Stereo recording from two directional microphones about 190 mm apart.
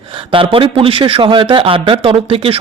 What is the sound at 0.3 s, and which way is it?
A man's voice, 30° right (ahead or behind).